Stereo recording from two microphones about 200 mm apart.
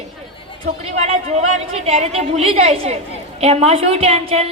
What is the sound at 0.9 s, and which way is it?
A man's voice, 30° right (ahead or behind).